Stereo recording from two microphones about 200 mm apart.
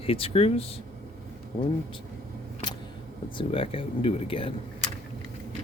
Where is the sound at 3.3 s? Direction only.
25° left (ahead or behind).